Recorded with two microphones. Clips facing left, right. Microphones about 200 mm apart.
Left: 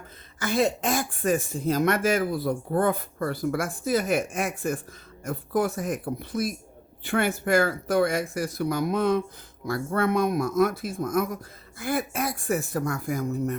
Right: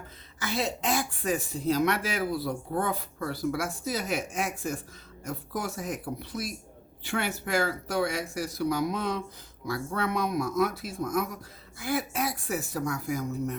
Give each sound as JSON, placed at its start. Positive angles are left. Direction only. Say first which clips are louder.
{"t": 0.3, "sound": "speech", "louder": "left 7 dB", "side_deg": 50}